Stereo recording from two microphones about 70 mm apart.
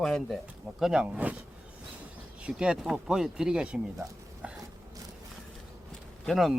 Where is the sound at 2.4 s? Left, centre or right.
Centre.